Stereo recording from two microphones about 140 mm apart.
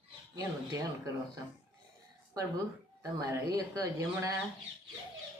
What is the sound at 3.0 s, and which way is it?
Speech, 25° right (ahead or behind).